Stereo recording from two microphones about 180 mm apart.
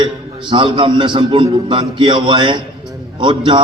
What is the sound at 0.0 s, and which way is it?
A man's voice, 25° right (ahead or behind).